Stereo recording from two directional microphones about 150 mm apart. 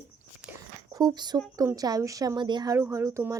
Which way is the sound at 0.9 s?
25° right (ahead or behind).